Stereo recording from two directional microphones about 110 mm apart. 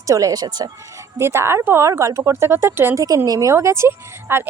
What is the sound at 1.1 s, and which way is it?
A woman's voice, 25° right (ahead or behind).